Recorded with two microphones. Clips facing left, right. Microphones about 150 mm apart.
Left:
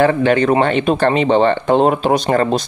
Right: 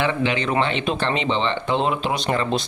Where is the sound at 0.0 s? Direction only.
50° left (ahead or behind).